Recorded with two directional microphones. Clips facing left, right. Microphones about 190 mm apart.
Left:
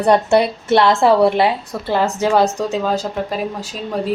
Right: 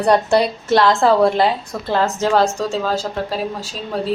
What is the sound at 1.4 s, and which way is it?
Speech, 10° left (ahead or behind).